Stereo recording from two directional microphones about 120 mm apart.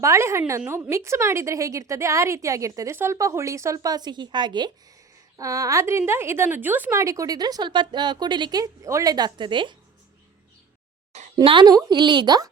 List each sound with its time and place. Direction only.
0.0 s a woman's voice: 25° right (ahead or behind); by 4.7 s 40° right (ahead or behind)
5.4 s a woman's voice: 25° right (ahead or behind)
11.4 s a woman's voice: 40° right (ahead or behind)